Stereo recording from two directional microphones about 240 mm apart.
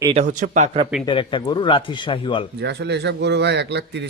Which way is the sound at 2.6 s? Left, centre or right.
Right.